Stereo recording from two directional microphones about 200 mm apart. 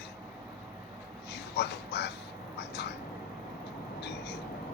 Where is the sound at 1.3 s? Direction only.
55° left (ahead or behind).